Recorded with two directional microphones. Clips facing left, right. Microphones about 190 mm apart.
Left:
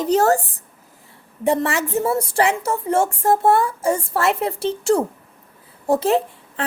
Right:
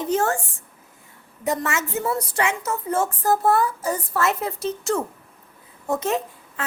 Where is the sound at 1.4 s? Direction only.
30° left (ahead or behind).